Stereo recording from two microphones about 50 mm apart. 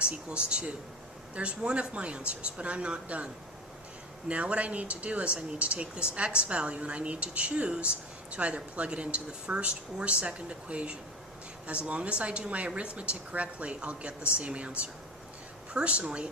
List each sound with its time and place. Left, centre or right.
0.0 s speech: right
4.3 s speech: right